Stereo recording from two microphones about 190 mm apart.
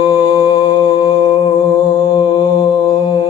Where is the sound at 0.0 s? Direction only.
20° left (ahead or behind).